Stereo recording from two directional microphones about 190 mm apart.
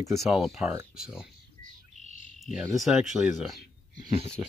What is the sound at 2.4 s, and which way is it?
Cricket, centre (ahead or behind).